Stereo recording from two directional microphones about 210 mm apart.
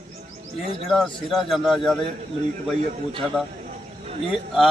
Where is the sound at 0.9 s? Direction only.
Centre (ahead or behind).